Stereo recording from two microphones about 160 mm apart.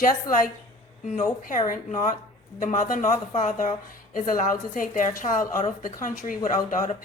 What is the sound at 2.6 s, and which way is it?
A woman's voice, 55° left (ahead or behind).